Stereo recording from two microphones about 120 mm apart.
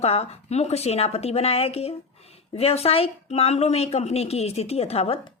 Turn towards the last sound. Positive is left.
turn(degrees=55)  # may be behind; listen again after turning